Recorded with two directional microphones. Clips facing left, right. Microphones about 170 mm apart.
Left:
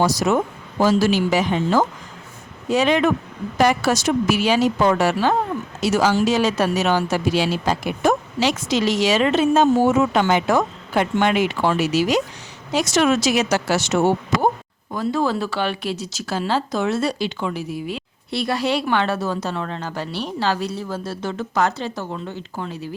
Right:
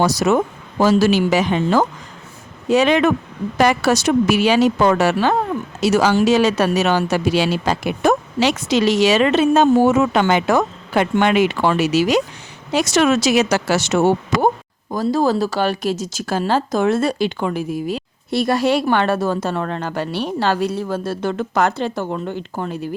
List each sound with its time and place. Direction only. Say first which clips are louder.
0.0 s speech: right 2 dB; 70° right (ahead or behind)
14.9 s speech: right 4 dB; 40° right (ahead or behind)